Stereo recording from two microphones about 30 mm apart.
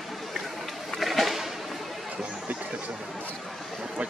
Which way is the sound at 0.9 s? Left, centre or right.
Centre.